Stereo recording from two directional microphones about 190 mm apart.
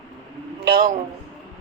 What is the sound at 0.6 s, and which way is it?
Speech, 55° right (ahead or behind).